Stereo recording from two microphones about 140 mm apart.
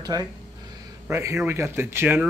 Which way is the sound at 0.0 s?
25° right (ahead or behind).